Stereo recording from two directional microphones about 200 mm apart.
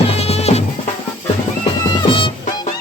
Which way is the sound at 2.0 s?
25° left (ahead or behind).